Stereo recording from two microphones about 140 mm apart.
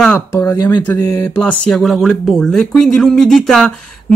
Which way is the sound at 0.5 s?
15° left (ahead or behind).